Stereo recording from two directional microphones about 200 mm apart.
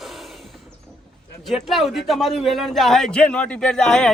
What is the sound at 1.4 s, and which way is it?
A man's voice, centre (ahead or behind).